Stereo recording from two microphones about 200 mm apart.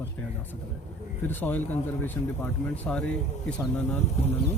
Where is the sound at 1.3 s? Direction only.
10° left (ahead or behind).